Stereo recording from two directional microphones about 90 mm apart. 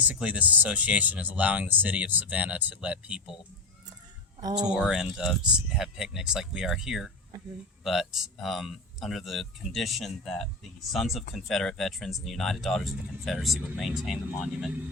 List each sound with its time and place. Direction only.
0.0 s speech: 15° right (ahead or behind)
4.4 s speech: 50° right (ahead or behind)
4.7 s speech: 5° right (ahead or behind)